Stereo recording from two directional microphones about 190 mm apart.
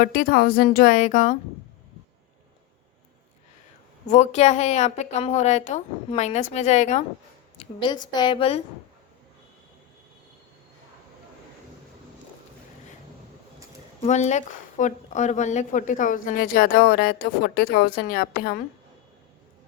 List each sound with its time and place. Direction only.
0.0 s a woman's voice: 50° left (ahead or behind)
4.1 s a woman's voice: 35° left (ahead or behind)
7.6 s a woman's voice: 25° left (ahead or behind)
14.0 s a woman's voice: 40° left (ahead or behind)